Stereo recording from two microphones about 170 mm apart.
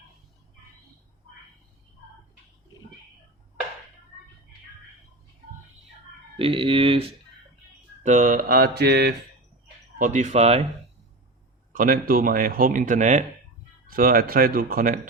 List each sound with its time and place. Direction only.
6.4 s speech: 30° right (ahead or behind)
8.0 s mantra: 50° right (ahead or behind); by 9.1 s 70° right (ahead or behind)
10.0 s speech: 45° right (ahead or behind)
11.7 s speech: 55° right (ahead or behind)
13.9 s mantra: 55° right (ahead or behind)